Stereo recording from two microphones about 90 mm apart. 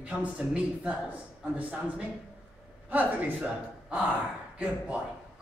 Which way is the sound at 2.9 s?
20° right (ahead or behind).